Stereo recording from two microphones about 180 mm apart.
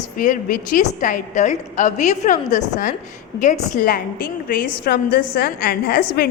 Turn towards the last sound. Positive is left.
turn(degrees=60)  # may be behind; listen again after turning